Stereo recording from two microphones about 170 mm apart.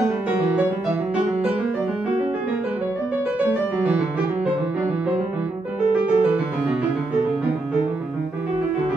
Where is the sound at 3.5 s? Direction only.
10° right (ahead or behind).